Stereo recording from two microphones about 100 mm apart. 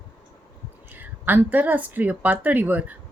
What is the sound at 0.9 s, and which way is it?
A woman's voice, 20° right (ahead or behind).